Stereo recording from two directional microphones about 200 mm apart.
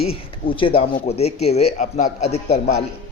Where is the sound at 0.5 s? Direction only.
25° left (ahead or behind).